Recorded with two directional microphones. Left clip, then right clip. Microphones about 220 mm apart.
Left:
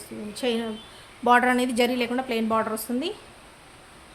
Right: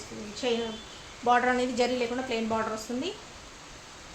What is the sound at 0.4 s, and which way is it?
Speech, 50° left (ahead or behind).